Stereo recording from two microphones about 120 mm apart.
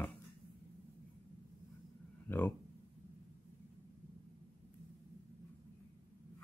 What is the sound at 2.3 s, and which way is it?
Speech, 20° left (ahead or behind).